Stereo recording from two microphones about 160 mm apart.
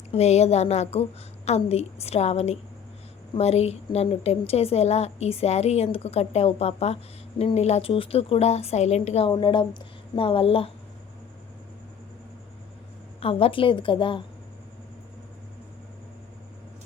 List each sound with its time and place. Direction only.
0.1 s a woman's voice: 40° left (ahead or behind)
9.3 s a woman's voice: 30° left (ahead or behind)
13.1 s a woman's voice: 35° left (ahead or behind)